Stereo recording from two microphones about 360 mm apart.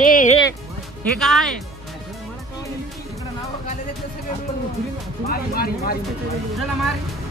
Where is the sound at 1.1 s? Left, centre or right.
Centre.